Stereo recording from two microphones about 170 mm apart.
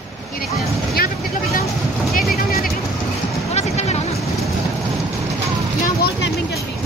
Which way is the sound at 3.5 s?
40° left (ahead or behind).